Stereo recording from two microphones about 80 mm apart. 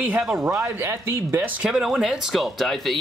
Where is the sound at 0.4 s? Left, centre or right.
Right.